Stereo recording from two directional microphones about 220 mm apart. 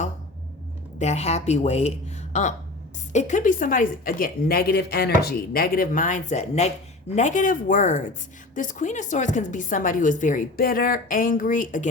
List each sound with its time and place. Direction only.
0.9 s a woman's voice: 30° left (ahead or behind)
3.1 s a woman's voice: 35° left (ahead or behind)